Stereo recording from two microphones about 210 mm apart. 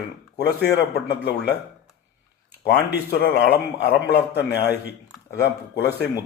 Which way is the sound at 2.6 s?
50° left (ahead or behind).